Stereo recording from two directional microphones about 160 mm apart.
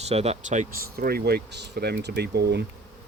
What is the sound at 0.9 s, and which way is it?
Speech, 70° right (ahead or behind).